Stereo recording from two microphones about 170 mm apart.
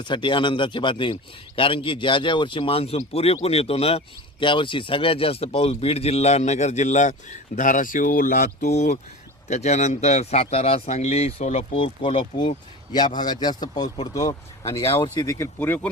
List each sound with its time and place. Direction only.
0.0 s speech: 30° left (ahead or behind); by 8.7 s 55° left (ahead or behind)
8.7 s speech: 40° left (ahead or behind); by 15.9 s 10° left (ahead or behind)